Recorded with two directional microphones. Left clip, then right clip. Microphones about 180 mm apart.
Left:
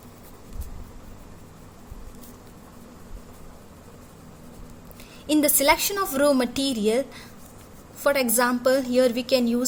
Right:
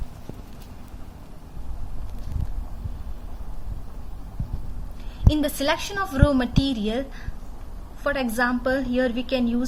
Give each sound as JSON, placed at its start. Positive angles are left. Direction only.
{"t": 5.3, "sound": "a woman's voice", "side_deg": 75}
{"t": 8.0, "sound": "a woman's voice", "side_deg": 80}